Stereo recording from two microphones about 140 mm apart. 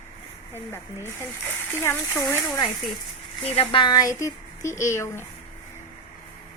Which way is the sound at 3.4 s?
45° left (ahead or behind).